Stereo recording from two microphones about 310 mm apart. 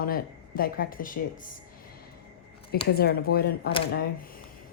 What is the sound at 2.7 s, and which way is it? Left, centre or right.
A woman's voice, left.